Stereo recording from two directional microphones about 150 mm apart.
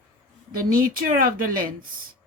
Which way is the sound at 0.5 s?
70° right (ahead or behind).